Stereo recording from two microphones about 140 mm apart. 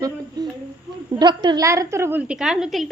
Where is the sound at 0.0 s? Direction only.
30° right (ahead or behind).